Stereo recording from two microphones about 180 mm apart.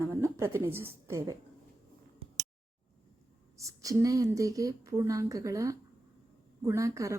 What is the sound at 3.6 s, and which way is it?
Speech, 20° right (ahead or behind).